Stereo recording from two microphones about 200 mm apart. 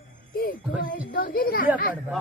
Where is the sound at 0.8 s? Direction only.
45° left (ahead or behind).